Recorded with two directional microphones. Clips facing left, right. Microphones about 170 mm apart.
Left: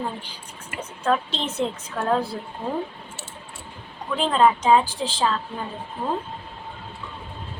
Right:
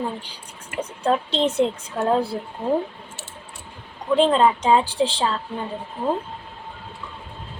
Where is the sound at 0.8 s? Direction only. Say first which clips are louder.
Right 2 dB; 30° right (ahead or behind).